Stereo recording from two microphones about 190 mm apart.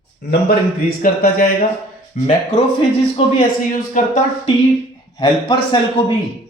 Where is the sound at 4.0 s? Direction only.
45° left (ahead or behind).